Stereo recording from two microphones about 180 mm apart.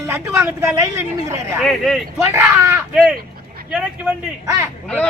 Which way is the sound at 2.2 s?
10° right (ahead or behind).